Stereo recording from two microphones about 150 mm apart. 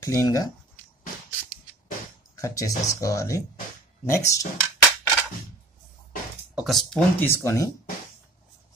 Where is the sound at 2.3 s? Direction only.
20° left (ahead or behind).